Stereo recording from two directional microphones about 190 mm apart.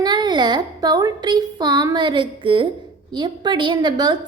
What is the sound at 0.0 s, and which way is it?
A woman's voice, 25° right (ahead or behind).